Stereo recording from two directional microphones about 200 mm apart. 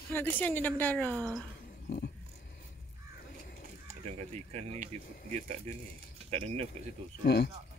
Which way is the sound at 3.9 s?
30° right (ahead or behind).